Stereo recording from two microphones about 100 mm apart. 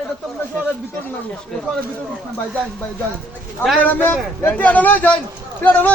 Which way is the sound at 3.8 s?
20° left (ahead or behind).